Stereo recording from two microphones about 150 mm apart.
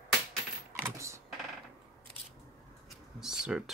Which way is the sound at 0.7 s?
20° right (ahead or behind).